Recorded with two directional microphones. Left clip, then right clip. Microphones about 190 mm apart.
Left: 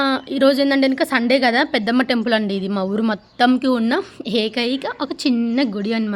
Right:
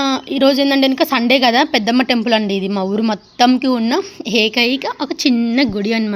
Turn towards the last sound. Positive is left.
turn(degrees=-15)  # may be behind; listen again after turning